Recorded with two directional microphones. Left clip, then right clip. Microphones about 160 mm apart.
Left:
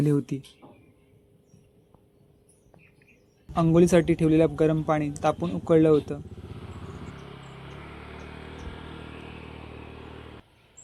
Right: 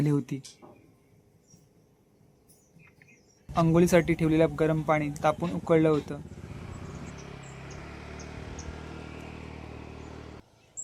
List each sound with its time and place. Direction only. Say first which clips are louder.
0.0 s a man's voice: left 3 dB; 10° left (ahead or behind)
3.5 s a man's voice: left 2 dB; 10° left (ahead or behind)
6.6 s vehicle: left 1 dB; 40° right (ahead or behind); by 10.4 s 85° right